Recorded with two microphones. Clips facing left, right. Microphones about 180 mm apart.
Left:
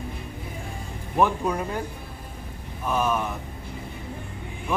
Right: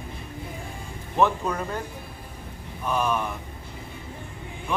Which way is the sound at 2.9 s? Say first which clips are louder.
Left 1 dB; centre (ahead or behind).